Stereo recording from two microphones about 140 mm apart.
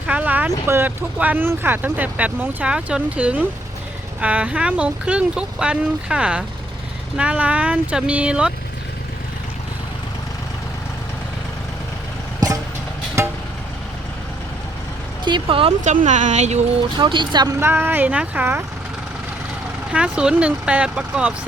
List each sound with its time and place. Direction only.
0.1 s vehicle: 10° right (ahead or behind)
0.7 s speech: 15° right (ahead or behind)
12.4 s vehicle: 30° right (ahead or behind)
15.2 s speech: 35° right (ahead or behind)
15.8 s speech: 60° right (ahead or behind)
17.0 s speech: 35° right (ahead or behind)
17.6 s speech: 15° right (ahead or behind)
19.9 s speech: 5° right (ahead or behind)